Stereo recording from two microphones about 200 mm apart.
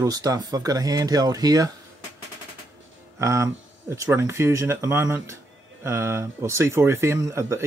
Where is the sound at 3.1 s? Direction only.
15° right (ahead or behind).